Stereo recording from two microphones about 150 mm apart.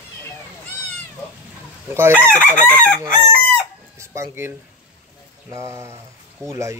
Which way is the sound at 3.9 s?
20° right (ahead or behind).